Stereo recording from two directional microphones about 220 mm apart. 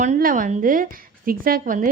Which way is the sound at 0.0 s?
35° right (ahead or behind).